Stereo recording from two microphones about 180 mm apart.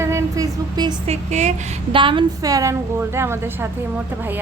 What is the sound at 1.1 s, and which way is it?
Speech, 40° right (ahead or behind).